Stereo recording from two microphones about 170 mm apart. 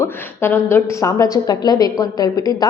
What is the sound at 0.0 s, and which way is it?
A woman's voice, 15° left (ahead or behind).